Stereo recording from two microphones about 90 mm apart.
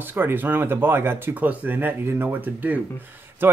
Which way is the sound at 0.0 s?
25° right (ahead or behind).